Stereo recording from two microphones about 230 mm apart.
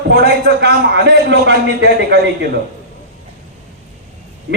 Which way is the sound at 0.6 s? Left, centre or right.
Right.